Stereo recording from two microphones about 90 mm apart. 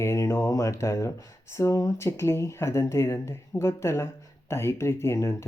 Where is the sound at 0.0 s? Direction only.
30° left (ahead or behind).